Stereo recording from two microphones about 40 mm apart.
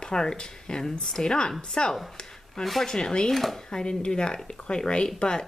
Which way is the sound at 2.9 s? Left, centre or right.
Left.